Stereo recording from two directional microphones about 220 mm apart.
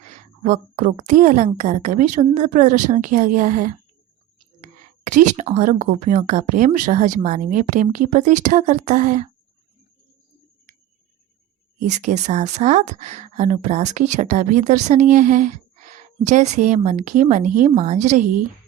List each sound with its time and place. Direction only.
0.4 s speech: 35° right (ahead or behind)
5.0 s speech: 35° right (ahead or behind)
11.9 s speech: 30° right (ahead or behind)